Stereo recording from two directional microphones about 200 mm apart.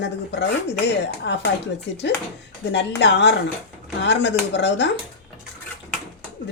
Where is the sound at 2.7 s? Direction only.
60° left (ahead or behind).